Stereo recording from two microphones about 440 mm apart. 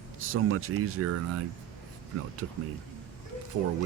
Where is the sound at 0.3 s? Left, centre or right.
Right.